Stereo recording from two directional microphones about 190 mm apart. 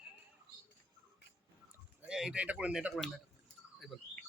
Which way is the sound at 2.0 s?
5° right (ahead or behind).